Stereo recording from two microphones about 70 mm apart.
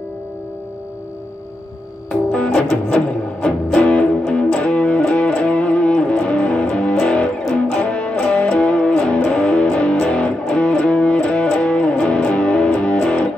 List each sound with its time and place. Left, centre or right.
2.0 s music: centre